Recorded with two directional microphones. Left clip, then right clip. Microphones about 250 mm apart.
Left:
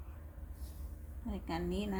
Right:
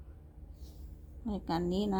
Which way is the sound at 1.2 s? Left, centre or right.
Right.